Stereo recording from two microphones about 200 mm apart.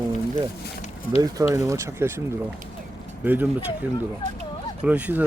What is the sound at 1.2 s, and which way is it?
Speech, 15° right (ahead or behind).